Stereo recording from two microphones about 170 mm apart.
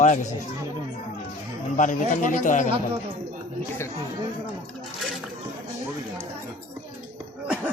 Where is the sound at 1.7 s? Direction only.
50° left (ahead or behind).